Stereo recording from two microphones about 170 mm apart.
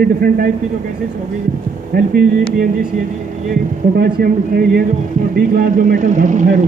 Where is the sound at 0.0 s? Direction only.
60° right (ahead or behind).